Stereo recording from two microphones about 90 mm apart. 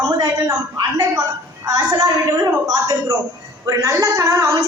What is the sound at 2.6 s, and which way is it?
A woman's voice, 45° right (ahead or behind).